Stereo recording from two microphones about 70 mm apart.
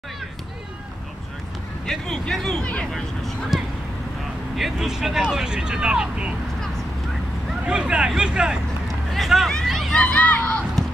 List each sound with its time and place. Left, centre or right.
1.9 s speech: centre
7.6 s speech: centre
9.1 s speech: centre
9.5 s hubbub: centre
9.9 s speech: centre